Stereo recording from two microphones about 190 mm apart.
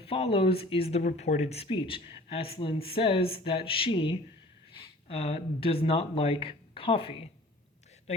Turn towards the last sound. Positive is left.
turn(degrees=30)  # may be behind; listen again after turning